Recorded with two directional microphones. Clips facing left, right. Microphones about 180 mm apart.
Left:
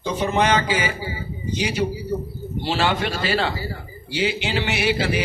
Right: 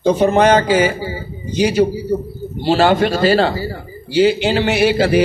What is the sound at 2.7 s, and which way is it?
A man's voice, 40° right (ahead or behind).